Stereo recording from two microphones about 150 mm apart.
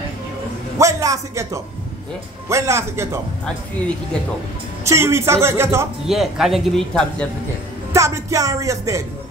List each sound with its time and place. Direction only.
0.7 s speech: 20° right (ahead or behind)
4.8 s speech: 20° right (ahead or behind)
6.0 s speech: centre (ahead or behind)
7.9 s speech: 20° right (ahead or behind)